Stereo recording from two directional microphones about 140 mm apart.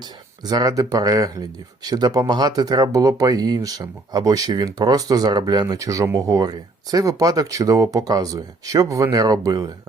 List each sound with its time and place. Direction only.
0.4 s speech: 25° right (ahead or behind)